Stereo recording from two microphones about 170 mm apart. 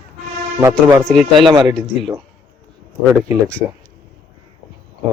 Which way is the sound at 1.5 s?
25° right (ahead or behind).